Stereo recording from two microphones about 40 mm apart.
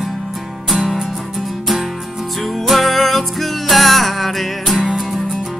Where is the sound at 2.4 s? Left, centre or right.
Centre.